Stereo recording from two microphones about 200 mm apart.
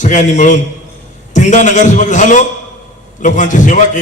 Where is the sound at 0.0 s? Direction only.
40° left (ahead or behind).